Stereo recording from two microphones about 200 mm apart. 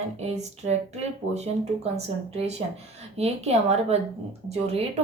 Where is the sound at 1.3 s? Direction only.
35° right (ahead or behind).